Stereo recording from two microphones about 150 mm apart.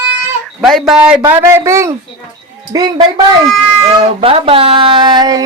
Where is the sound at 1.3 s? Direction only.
15° right (ahead or behind).